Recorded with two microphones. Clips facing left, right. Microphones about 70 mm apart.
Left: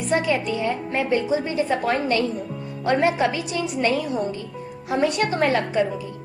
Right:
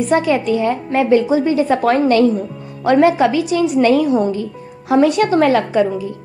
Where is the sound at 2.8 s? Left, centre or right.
Right.